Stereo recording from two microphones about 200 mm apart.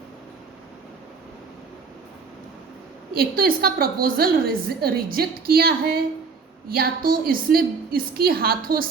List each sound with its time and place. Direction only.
3.2 s a woman's voice: 45° right (ahead or behind)